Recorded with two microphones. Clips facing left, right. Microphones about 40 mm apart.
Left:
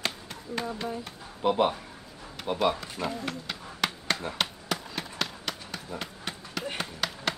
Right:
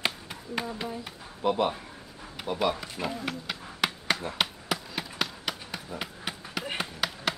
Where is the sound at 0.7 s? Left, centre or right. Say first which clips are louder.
Left 1 dB; centre.